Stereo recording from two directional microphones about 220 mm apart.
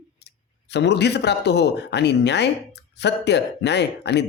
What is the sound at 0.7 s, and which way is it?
Speech, 50° left (ahead or behind).